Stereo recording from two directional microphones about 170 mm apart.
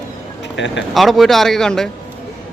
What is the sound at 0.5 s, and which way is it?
Speech, 90° left.